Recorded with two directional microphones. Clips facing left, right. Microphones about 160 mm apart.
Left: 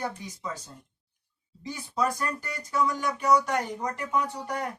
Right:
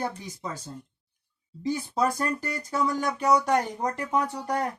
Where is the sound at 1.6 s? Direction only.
30° right (ahead or behind).